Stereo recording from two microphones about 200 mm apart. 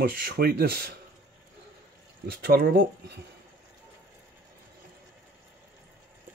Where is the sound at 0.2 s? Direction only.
50° right (ahead or behind).